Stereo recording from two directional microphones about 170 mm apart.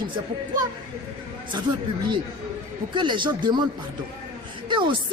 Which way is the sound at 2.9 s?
30° right (ahead or behind).